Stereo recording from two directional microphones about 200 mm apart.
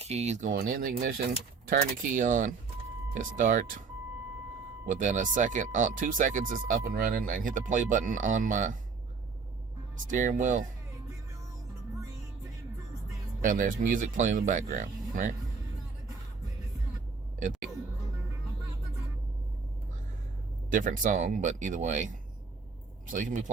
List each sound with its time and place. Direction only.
0.0 s speech: 30° right (ahead or behind)
4.9 s speech: 40° right (ahead or behind)
10.1 s speech: 40° right (ahead or behind)
13.4 s speech: 40° right (ahead or behind)
20.7 s speech: 40° right (ahead or behind)